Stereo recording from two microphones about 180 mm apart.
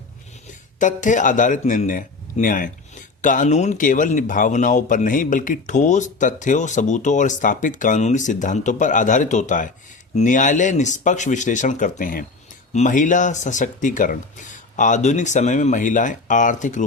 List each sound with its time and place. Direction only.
0.8 s a man's voice: 45° left (ahead or behind)